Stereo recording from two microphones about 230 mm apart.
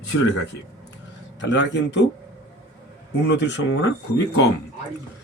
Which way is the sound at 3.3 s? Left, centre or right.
Left.